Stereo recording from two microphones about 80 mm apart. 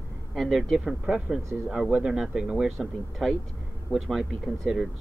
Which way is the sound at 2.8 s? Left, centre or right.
Centre.